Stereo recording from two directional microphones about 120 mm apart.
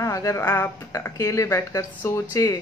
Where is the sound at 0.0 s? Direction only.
25° left (ahead or behind).